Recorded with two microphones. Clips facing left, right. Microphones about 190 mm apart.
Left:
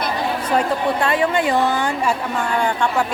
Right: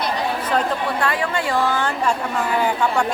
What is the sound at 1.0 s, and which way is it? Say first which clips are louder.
A woman's voice: left 5 dB; 20° left (ahead or behind).